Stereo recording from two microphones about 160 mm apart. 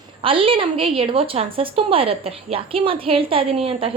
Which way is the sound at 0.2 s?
35° right (ahead or behind).